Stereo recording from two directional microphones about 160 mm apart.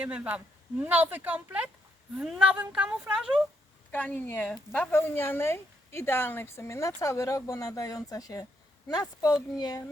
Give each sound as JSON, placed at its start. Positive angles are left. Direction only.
{"t": 0.0, "sound": "speech", "side_deg": -10}
{"t": 3.9, "sound": "speech", "side_deg": 10}